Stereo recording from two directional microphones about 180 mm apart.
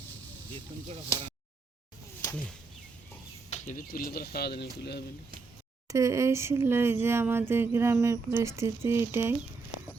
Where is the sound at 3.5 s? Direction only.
40° left (ahead or behind); by 4.7 s 60° left (ahead or behind).